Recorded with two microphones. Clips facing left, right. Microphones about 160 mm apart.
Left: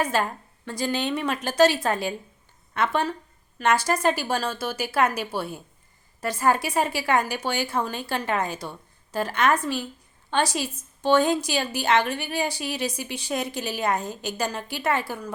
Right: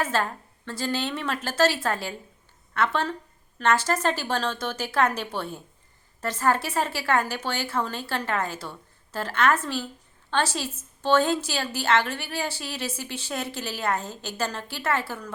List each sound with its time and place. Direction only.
0.0 s a woman's voice: 15° left (ahead or behind)